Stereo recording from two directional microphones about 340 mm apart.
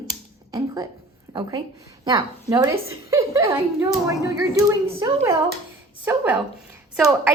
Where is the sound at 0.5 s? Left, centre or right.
Centre.